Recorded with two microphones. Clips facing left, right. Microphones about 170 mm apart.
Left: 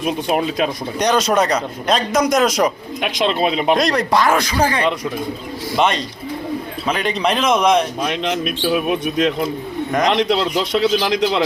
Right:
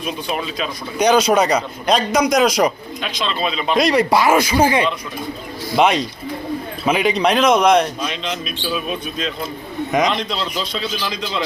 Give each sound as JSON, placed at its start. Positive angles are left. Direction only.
{"t": 0.0, "sound": "speech", "side_deg": 55}
{"t": 0.9, "sound": "a man's voice", "side_deg": 0}
{"t": 3.0, "sound": "speech", "side_deg": 60}
{"t": 3.8, "sound": "a man's voice", "side_deg": -5}
{"t": 8.0, "sound": "a man's voice", "side_deg": 60}